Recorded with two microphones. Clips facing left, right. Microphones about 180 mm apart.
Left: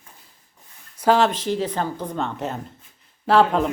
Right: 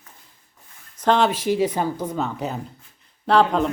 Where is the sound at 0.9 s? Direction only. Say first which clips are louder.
Left 1 dB; 5° left (ahead or behind).